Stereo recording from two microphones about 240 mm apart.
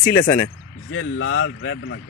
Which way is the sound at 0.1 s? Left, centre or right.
Centre.